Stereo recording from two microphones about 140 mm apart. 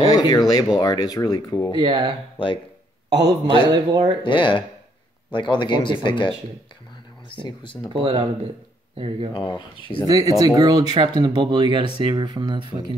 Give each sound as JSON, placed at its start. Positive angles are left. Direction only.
{"t": 0.1, "sound": "speech", "side_deg": 25}
{"t": 1.8, "sound": "a man's voice", "side_deg": -35}
{"t": 4.2, "sound": "speech", "side_deg": 35}
{"t": 7.9, "sound": "speech", "side_deg": -35}
{"t": 9.3, "sound": "speech", "side_deg": 35}
{"t": 10.0, "sound": "a man's voice", "side_deg": -25}